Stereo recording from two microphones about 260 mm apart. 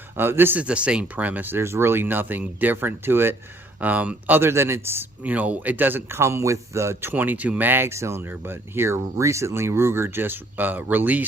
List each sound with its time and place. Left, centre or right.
0.2 s speech: centre